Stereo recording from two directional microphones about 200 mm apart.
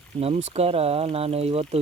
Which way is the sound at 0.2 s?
30° right (ahead or behind).